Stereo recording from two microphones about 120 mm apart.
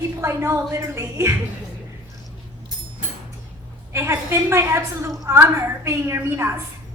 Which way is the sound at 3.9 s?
20° right (ahead or behind).